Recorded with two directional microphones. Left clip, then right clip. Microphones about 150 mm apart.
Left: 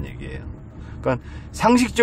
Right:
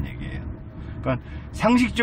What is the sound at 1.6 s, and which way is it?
Speech, 35° left (ahead or behind).